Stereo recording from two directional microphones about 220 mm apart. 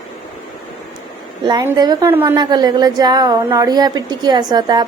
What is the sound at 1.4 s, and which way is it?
A woman's voice, 20° right (ahead or behind).